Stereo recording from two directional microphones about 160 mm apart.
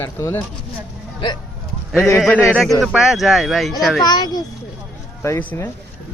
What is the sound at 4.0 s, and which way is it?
Speech, 25° left (ahead or behind).